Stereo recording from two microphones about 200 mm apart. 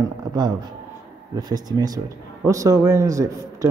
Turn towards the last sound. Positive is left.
turn(degrees=-15)  # may be behind; listen again after turning